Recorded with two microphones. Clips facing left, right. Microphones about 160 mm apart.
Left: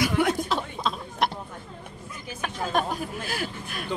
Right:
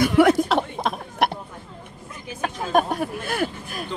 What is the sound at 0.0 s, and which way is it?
Chuckle, 70° right (ahead or behind).